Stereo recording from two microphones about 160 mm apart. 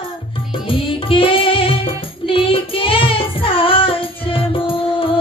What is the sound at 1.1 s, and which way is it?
Music, 35° left (ahead or behind).